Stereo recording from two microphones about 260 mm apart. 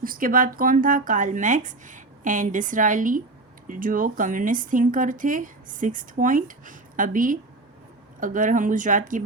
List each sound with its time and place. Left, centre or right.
0.0 s speech: right